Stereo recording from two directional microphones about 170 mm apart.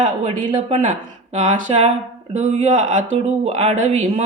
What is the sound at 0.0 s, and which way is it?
Speech, 40° right (ahead or behind).